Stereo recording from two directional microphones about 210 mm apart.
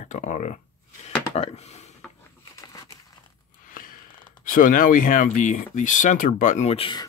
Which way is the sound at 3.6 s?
40° left (ahead or behind).